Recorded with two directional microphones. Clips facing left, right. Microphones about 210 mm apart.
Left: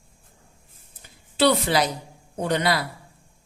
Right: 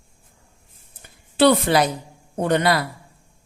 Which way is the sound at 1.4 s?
50° right (ahead or behind).